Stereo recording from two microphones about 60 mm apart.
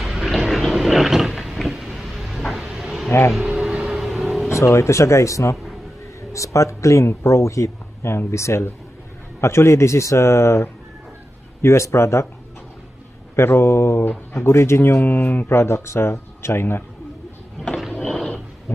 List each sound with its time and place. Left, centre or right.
0.0 s vehicle: centre
2.7 s insect: centre
3.1 s speech: left
3.5 s vehicle: centre
4.5 s speech: left
13.4 s speech: left
18.0 s dog: centre